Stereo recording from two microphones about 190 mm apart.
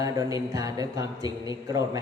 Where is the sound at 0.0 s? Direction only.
20° right (ahead or behind).